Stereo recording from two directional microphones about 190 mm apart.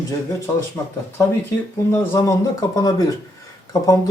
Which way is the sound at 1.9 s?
15° left (ahead or behind).